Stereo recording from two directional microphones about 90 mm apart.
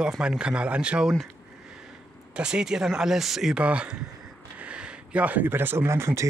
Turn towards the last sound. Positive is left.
turn(degrees=-30)  # may be behind; listen again after turning